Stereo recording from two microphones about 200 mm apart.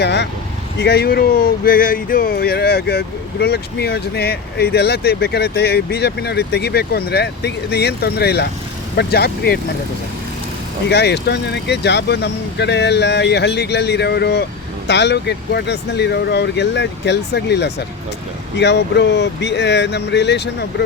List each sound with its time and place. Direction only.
0.0 s speech: 60° left (ahead or behind)
10.8 s speech: 55° left (ahead or behind)